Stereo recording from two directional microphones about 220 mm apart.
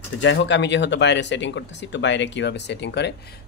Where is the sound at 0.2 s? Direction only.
55° left (ahead or behind).